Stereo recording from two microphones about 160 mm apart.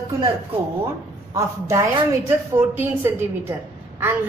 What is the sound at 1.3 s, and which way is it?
A woman's voice, 20° right (ahead or behind).